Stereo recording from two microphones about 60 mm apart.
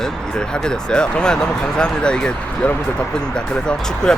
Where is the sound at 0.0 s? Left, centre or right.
Centre.